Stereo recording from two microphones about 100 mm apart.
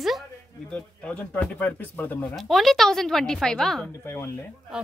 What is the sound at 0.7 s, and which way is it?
Speech, 10° left (ahead or behind).